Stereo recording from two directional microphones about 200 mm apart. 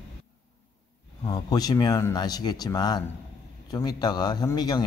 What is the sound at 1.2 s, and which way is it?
Speech, 20° left (ahead or behind).